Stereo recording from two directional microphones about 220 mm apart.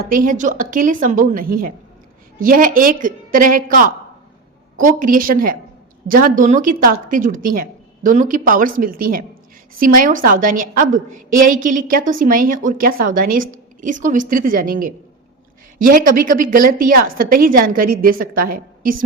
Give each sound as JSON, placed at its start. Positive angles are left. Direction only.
{"t": 0.0, "sound": "a woman's voice", "side_deg": -40}